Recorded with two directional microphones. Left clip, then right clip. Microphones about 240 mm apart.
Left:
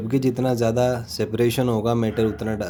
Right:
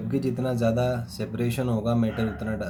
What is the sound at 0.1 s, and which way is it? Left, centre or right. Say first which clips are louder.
Speech: left 6 dB; left.